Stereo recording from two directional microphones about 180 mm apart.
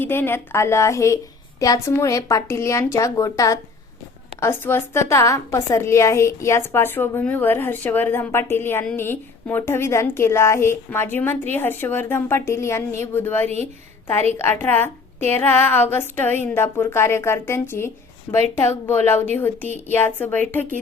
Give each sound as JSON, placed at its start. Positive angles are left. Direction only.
{"t": 0.0, "sound": "a woman's voice", "side_deg": 10}